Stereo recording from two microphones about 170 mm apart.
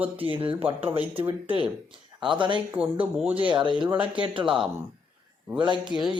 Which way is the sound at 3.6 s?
30° right (ahead or behind).